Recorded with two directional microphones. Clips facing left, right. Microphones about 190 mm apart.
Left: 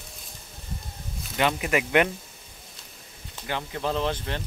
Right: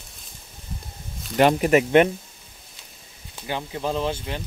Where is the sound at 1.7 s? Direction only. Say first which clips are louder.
Right 5 dB; 25° right (ahead or behind).